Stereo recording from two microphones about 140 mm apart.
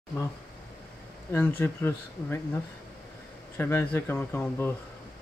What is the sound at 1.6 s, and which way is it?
Speech, 15° left (ahead or behind).